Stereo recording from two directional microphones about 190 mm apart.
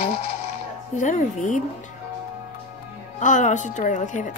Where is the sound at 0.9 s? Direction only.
40° left (ahead or behind).